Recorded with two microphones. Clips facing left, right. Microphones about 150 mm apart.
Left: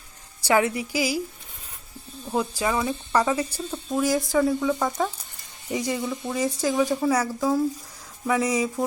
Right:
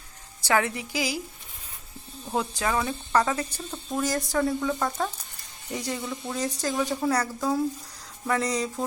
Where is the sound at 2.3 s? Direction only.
5° left (ahead or behind).